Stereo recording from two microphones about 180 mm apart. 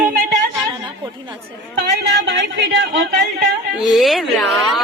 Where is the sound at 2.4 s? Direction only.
90° right.